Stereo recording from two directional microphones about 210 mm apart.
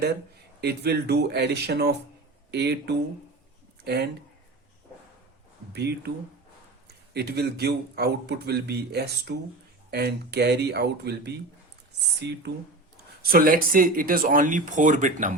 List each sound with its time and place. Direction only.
0.6 s speech: 50° right (ahead or behind)
5.7 s speech: 55° right (ahead or behind)
7.1 s speech: 50° right (ahead or behind)
13.2 s speech: 45° right (ahead or behind)